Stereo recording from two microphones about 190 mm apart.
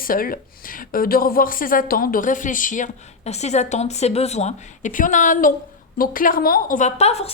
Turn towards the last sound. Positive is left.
turn(degrees=35)  # may be behind; listen again after turning